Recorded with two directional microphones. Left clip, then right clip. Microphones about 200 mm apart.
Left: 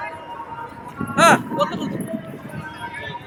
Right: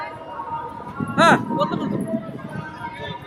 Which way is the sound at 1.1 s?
60° left (ahead or behind).